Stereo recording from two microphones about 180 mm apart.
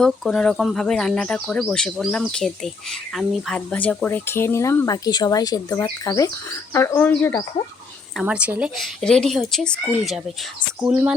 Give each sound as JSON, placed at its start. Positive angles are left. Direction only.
{"t": 0.0, "sound": "speech", "side_deg": 5}
{"t": 8.2, "sound": "speech", "side_deg": -5}